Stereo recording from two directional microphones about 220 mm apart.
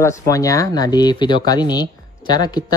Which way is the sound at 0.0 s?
15° left (ahead or behind).